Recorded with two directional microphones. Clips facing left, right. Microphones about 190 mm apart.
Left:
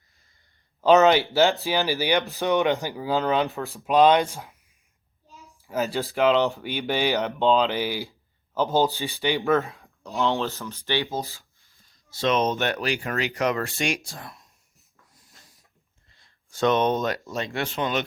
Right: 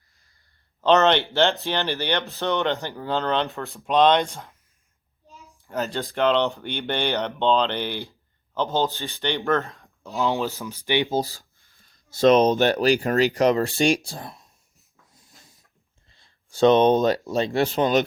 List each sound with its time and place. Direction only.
0.8 s speech: 5° left (ahead or behind)
5.6 s speech: 5° left (ahead or behind); by 11.1 s 15° right (ahead or behind)
11.1 s speech: 35° right (ahead or behind)
11.6 s speech: 50° right (ahead or behind); by 14.4 s 30° right (ahead or behind)
16.0 s speech: 30° right (ahead or behind)